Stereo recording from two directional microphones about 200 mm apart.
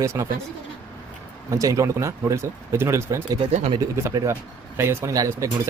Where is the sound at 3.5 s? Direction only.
30° right (ahead or behind).